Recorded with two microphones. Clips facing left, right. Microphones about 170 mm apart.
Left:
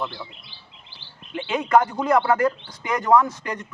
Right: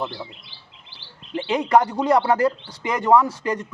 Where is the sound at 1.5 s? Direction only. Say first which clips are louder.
Right 1 dB; 35° right (ahead or behind).